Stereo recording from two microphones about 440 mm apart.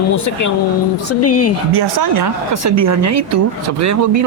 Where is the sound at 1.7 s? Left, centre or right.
Right.